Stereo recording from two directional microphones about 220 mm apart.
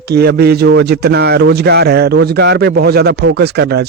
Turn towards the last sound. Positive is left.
turn(degrees=-45)  # may be behind; listen again after turning